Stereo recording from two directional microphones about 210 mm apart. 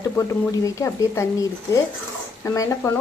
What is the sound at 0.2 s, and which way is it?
Speech, 15° left (ahead or behind).